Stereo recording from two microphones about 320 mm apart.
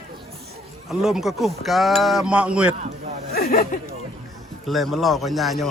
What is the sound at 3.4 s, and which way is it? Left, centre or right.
Speech, left.